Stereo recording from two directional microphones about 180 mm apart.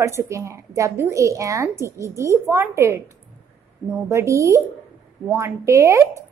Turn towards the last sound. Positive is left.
turn(degrees=-15)  # may be behind; listen again after turning